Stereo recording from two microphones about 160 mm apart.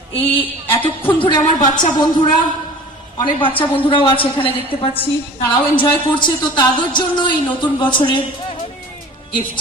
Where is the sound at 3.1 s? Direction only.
30° left (ahead or behind).